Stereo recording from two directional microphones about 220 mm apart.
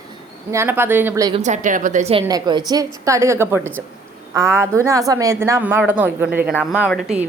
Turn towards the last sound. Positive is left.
turn(degrees=0)  # may be behind; listen again after turning